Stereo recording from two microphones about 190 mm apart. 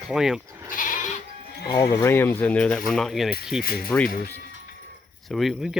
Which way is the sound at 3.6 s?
55° left (ahead or behind).